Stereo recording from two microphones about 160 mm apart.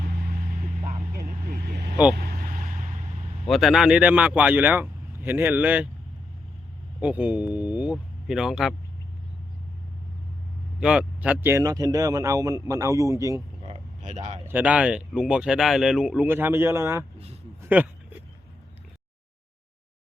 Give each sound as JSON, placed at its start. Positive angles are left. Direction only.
{"t": 1.1, "sound": "vehicle", "side_deg": -70}
{"t": 3.4, "sound": "speech", "side_deg": 0}
{"t": 7.0, "sound": "speech", "side_deg": -10}
{"t": 10.8, "sound": "speech", "side_deg": -5}
{"t": 14.0, "sound": "speech", "side_deg": -50}
{"t": 14.4, "sound": "speech", "side_deg": -10}
{"t": 17.6, "sound": "a sound", "side_deg": -10}